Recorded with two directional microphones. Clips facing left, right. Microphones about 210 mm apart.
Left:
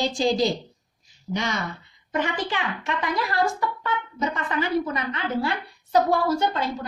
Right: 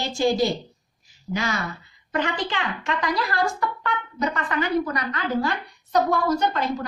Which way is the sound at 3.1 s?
20° left (ahead or behind).